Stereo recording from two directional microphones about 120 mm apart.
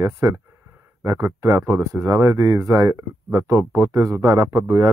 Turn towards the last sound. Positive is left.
turn(degrees=-30)  # may be behind; listen again after turning